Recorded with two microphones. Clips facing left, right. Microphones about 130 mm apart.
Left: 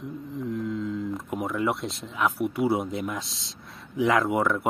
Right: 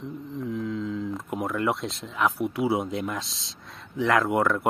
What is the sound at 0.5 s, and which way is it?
Speech, centre (ahead or behind).